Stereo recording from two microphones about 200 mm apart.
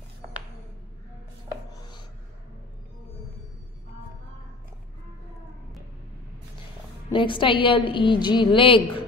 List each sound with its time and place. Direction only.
7.1 s a woman's voice: 25° left (ahead or behind)